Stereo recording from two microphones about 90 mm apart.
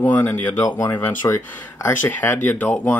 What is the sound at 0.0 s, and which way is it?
Speech, 20° left (ahead or behind).